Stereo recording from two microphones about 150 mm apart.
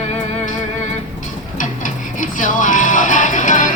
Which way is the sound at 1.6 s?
60° left (ahead or behind).